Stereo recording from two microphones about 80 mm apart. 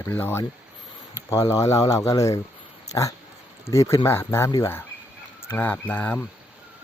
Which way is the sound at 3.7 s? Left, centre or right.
Left.